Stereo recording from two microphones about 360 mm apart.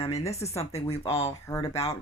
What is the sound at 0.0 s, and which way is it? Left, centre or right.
Speech, centre.